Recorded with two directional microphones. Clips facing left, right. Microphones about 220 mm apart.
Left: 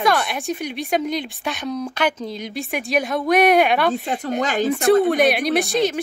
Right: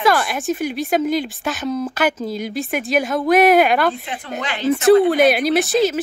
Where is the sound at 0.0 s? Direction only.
Centre (ahead or behind).